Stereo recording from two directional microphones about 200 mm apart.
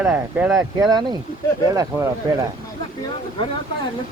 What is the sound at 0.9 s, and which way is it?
Speech, 20° right (ahead or behind).